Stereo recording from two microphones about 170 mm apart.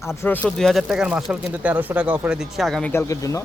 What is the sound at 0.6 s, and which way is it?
A man's voice, centre (ahead or behind).